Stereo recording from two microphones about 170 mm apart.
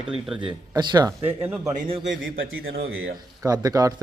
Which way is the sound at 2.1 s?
90° right.